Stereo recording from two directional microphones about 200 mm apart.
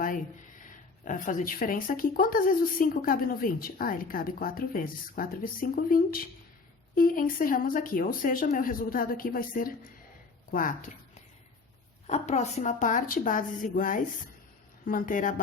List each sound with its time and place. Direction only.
1.0 s speech: 40° left (ahead or behind)
12.0 s a woman's voice: 35° left (ahead or behind)